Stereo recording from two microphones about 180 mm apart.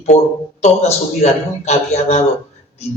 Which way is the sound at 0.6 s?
40° left (ahead or behind).